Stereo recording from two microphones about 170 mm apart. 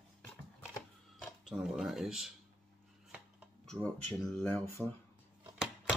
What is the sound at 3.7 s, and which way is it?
Speech, 5° left (ahead or behind).